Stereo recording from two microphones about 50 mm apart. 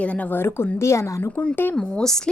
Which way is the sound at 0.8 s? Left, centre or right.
Left.